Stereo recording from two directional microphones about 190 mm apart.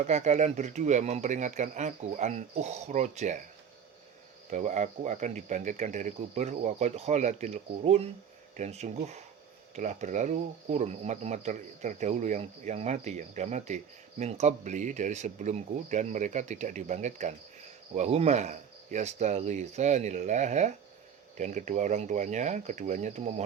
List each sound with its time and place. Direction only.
0.0 s speech: 40° right (ahead or behind)
4.5 s speech: 40° right (ahead or behind)